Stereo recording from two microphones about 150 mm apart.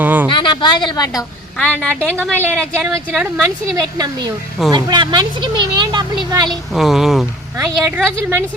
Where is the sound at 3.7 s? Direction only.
25° right (ahead or behind).